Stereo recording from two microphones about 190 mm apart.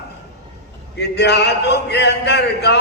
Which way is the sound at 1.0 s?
60° left (ahead or behind).